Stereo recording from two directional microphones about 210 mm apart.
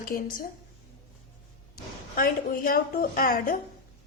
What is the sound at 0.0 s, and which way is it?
Speech, 40° left (ahead or behind).